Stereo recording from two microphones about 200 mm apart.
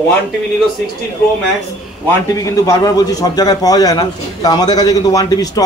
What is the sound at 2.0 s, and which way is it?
A man's voice, 15° left (ahead or behind).